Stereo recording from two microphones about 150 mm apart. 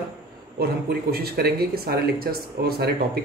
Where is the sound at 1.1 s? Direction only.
90° right.